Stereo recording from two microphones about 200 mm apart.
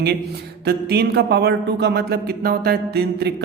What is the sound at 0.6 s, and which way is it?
A woman's voice, 55° right (ahead or behind).